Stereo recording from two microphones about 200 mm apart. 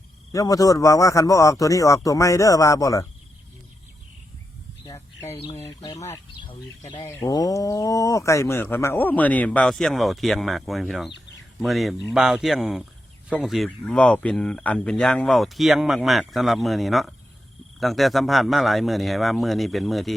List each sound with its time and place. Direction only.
0.3 s speech: 15° left (ahead or behind)
5.6 s speech: 15° left (ahead or behind); by 20.1 s centre (ahead or behind)